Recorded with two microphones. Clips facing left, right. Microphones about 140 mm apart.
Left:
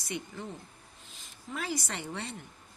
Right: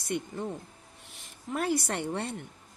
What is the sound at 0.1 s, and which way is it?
Speech, 50° right (ahead or behind).